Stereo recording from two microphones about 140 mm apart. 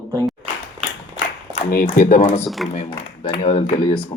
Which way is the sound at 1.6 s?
70° left (ahead or behind).